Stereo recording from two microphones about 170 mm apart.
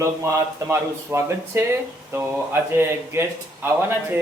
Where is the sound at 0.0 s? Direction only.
15° right (ahead or behind).